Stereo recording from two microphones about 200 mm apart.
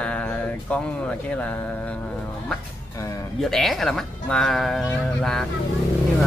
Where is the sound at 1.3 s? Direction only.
5° left (ahead or behind).